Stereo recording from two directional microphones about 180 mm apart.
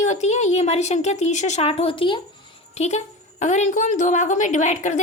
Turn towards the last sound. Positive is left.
turn(degrees=40)  # may be behind; listen again after turning